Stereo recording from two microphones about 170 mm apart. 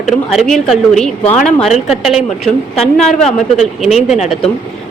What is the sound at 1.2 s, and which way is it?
Speech, 40° left (ahead or behind).